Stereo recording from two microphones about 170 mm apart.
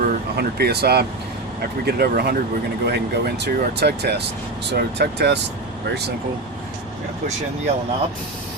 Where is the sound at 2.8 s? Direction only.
75° right (ahead or behind).